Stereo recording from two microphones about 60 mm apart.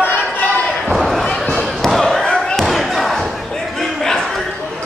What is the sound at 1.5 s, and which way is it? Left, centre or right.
Basketball bounce, centre.